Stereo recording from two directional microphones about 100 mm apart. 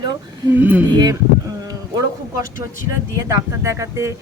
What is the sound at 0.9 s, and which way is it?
Speech, 45° right (ahead or behind).